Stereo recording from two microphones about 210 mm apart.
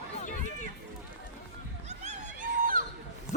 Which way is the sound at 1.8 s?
35° right (ahead or behind).